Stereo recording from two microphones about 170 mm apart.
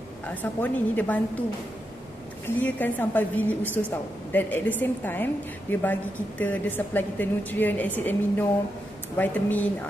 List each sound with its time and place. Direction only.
0.3 s a woman's voice: 10° left (ahead or behind)
2.4 s a woman's voice: 10° left (ahead or behind)